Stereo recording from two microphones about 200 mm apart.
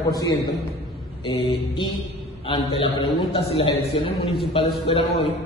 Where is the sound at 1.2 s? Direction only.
20° left (ahead or behind).